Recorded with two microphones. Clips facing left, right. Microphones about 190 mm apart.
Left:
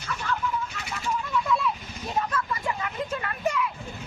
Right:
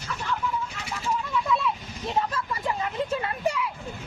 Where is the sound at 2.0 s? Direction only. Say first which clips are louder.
Right 1 dB; 25° right (ahead or behind).